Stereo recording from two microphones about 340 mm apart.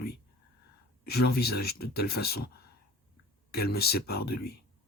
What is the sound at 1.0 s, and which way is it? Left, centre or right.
Speech, left.